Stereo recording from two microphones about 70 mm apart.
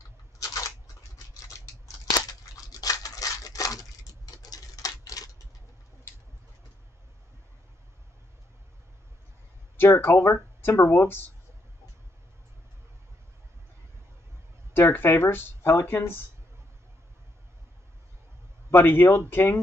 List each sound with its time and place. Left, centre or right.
0.4 s a sound: left
2.1 s scissors: left
9.8 s speech: left
14.7 s speech: left
18.7 s speech: left